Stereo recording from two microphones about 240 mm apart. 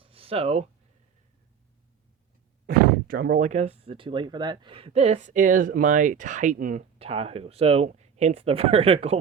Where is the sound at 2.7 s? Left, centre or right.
Right.